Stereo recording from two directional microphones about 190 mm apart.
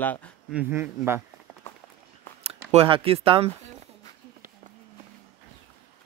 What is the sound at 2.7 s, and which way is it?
Speech, 30° right (ahead or behind).